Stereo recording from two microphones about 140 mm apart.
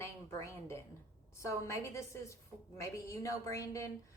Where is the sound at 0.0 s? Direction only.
20° left (ahead or behind).